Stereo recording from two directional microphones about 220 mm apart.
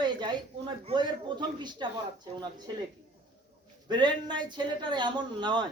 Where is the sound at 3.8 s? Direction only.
20° right (ahead or behind).